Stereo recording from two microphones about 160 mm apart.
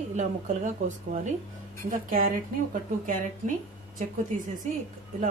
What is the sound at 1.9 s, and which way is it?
Speech, 60° right (ahead or behind).